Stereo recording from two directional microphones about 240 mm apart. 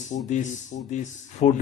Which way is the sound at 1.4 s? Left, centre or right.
Left.